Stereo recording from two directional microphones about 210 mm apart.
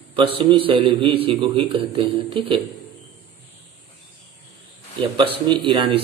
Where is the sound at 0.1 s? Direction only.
25° right (ahead or behind).